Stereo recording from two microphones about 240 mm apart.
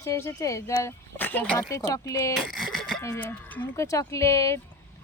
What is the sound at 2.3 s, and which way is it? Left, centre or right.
Speech, centre.